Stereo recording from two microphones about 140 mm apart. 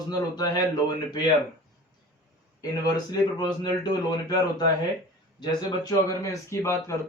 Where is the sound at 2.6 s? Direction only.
30° left (ahead or behind).